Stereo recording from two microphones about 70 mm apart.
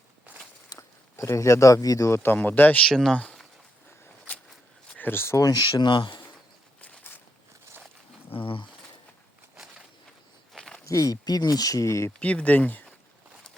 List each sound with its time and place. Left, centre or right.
0.7 s speech: left
2.0 s speech: left
2.8 s speech: centre
4.9 s speech: left
5.4 s speech: left
10.5 s a sound: centre
10.8 s speech: left
12.2 s speech: centre